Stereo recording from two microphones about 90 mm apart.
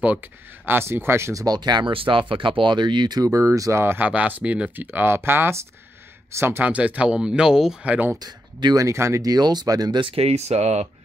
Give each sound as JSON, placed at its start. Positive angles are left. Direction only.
{"t": 0.0, "sound": "speech", "side_deg": -20}
{"t": 1.4, "sound": "speech", "side_deg": -50}
{"t": 1.9, "sound": "speech", "side_deg": -75}
{"t": 3.3, "sound": "speech", "side_deg": -35}
{"t": 6.6, "sound": "speech", "side_deg": -15}
{"t": 8.2, "sound": "speech", "side_deg": -50}
{"t": 8.8, "sound": "speech", "side_deg": -30}
{"t": 9.2, "sound": "speech", "side_deg": -45}
{"t": 9.9, "sound": "speech", "side_deg": -75}